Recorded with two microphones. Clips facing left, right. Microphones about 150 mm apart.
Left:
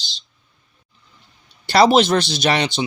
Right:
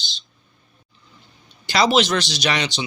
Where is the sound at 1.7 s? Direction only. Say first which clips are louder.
Left 5 dB; 55° left (ahead or behind).